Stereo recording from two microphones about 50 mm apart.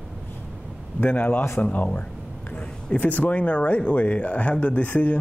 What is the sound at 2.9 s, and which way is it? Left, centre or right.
Speech, left.